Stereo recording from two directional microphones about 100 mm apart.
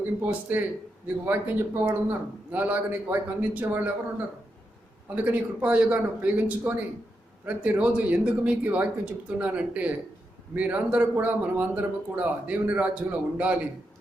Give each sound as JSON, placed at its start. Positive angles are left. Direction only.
{"t": 0.0, "sound": "a man's voice", "side_deg": -15}
{"t": 5.1, "sound": "speech", "side_deg": -15}